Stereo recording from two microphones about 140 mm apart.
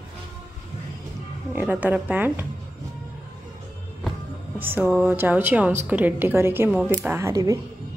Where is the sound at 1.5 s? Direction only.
10° right (ahead or behind).